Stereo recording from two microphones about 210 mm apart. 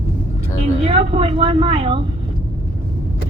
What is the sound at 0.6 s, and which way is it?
A woman's voice, 25° right (ahead or behind).